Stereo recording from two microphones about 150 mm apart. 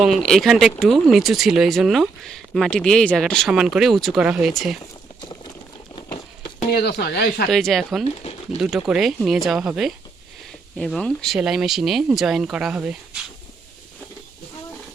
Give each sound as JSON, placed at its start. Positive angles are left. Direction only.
{"t": 0.0, "sound": "speech", "side_deg": 0}
{"t": 5.2, "sound": "clip-clop", "side_deg": 30}
{"t": 6.7, "sound": "speech", "side_deg": 90}
{"t": 7.5, "sound": "speech", "side_deg": 0}